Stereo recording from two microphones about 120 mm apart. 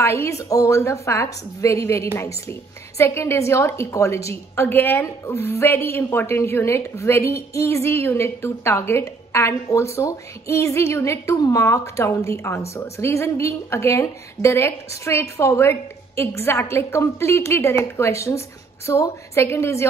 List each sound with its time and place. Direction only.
0.0 s a woman's voice: 25° left (ahead or behind)